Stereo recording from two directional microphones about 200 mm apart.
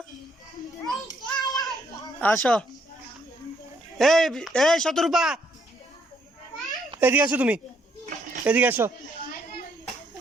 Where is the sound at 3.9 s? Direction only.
Centre (ahead or behind).